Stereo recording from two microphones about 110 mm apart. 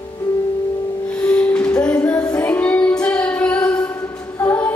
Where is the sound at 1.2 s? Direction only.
10° left (ahead or behind).